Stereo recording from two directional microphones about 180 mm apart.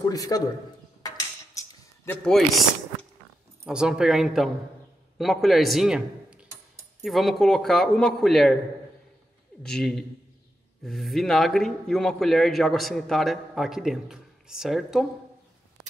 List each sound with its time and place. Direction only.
0.0 s a man's voice: 20° left (ahead or behind)
1.0 s a sound: 20° left (ahead or behind)
2.0 s a man's voice: centre (ahead or behind)
9.6 s a man's voice: 5° left (ahead or behind)